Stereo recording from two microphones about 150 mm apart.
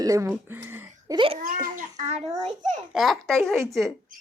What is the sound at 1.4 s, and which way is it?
Speech, 65° right (ahead or behind).